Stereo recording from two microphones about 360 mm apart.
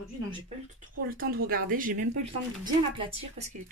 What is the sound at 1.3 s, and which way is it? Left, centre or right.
Speech, right.